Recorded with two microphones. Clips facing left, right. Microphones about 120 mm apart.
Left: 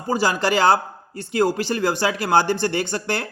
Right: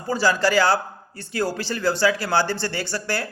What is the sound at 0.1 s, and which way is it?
Speech, 20° left (ahead or behind).